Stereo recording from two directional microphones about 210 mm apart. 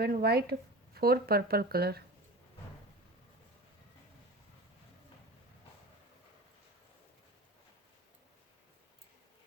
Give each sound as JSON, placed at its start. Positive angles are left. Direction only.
{"t": 0.0, "sound": "speech", "side_deg": -45}